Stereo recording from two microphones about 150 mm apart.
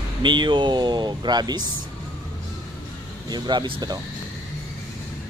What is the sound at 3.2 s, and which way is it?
Speech, 30° right (ahead or behind).